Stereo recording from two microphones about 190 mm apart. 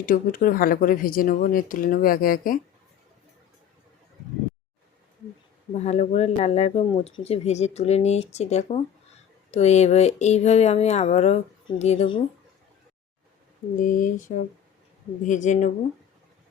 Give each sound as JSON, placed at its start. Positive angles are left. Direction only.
{"t": 0.0, "sound": "speech", "side_deg": 45}
{"t": 5.7, "sound": "speech", "side_deg": 35}
{"t": 13.7, "sound": "speech", "side_deg": 45}